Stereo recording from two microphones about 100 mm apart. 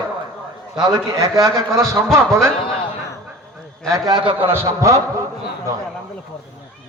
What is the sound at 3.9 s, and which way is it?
Speech, 40° right (ahead or behind).